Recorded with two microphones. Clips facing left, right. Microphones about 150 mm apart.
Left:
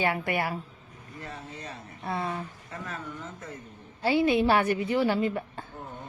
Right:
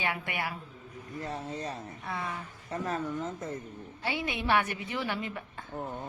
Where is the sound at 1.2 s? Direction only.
35° right (ahead or behind).